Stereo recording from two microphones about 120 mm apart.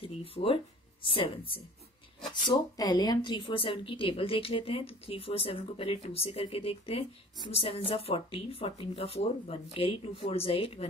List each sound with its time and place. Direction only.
0.0 s speech: 50° left (ahead or behind)
2.4 s speech: 35° left (ahead or behind); by 10.9 s 50° left (ahead or behind)